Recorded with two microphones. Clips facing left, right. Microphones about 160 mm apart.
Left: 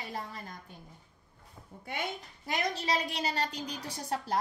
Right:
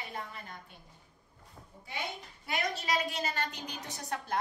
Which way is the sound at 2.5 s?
35° left (ahead or behind).